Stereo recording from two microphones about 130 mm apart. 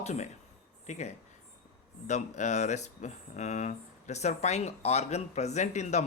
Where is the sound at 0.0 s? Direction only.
60° left (ahead or behind).